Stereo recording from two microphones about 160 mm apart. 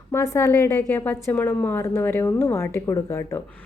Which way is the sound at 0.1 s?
15° left (ahead or behind).